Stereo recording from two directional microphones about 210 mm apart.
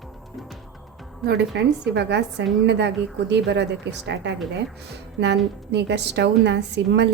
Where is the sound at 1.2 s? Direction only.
55° right (ahead or behind).